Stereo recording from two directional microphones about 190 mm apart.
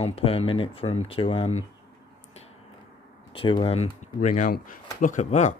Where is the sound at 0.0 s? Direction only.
30° left (ahead or behind).